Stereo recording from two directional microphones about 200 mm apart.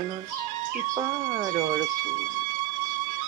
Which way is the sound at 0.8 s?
15° right (ahead or behind).